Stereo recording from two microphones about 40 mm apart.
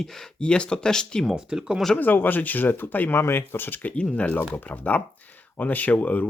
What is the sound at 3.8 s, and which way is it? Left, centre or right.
Speech, left.